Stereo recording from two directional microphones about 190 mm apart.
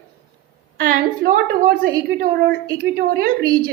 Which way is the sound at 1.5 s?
50° right (ahead or behind).